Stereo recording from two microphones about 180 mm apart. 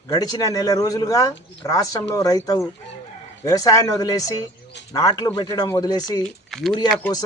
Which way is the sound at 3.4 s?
20° left (ahead or behind).